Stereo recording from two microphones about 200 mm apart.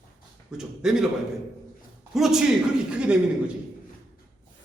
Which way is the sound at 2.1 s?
Centre (ahead or behind).